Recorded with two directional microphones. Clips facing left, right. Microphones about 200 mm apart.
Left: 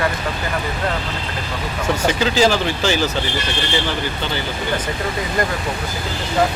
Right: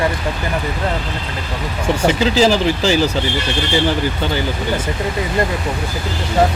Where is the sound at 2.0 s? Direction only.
30° right (ahead or behind).